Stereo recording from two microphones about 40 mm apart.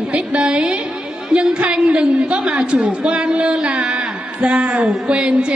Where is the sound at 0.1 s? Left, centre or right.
Right.